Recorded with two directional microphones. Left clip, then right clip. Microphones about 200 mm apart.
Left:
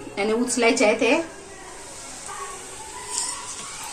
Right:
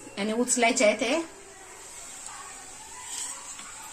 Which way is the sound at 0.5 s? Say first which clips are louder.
Left 3 dB; 50° right (ahead or behind).